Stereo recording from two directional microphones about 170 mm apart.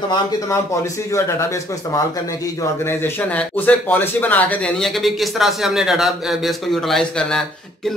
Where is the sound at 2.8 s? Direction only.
10° left (ahead or behind).